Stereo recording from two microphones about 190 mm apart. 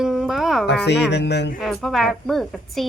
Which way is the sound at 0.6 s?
65° left (ahead or behind).